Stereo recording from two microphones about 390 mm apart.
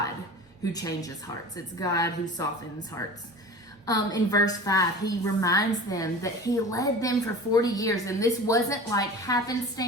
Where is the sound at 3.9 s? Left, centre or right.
Centre.